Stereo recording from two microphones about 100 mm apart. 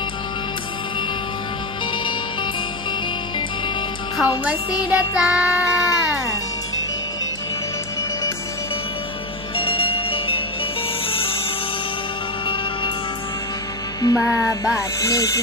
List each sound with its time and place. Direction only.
4.9 s music: 10° right (ahead or behind)
5.7 s speech: 30° left (ahead or behind)
9.6 s music: 65° left (ahead or behind)
14.0 s speech: 30° left (ahead or behind)